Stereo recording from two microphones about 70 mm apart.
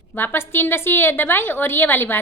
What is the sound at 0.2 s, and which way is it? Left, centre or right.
A woman's voice, left.